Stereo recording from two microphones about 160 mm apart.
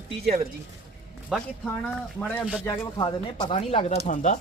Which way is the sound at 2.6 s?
25° left (ahead or behind).